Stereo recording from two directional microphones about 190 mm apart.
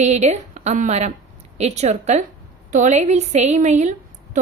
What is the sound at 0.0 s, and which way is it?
A woman's voice, 35° right (ahead or behind).